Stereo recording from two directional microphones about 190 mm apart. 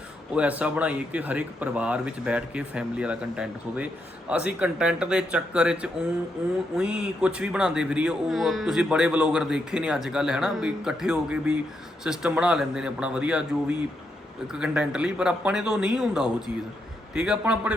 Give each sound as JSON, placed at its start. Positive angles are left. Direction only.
{"t": 0.3, "sound": "speech", "side_deg": -5}